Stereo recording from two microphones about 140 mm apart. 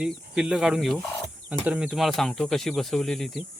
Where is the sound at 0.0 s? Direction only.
5° right (ahead or behind).